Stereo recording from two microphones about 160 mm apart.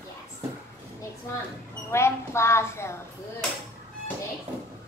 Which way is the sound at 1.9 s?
15° left (ahead or behind).